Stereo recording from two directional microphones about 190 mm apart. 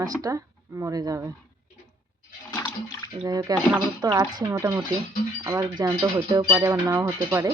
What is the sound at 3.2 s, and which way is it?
Speech, 20° right (ahead or behind).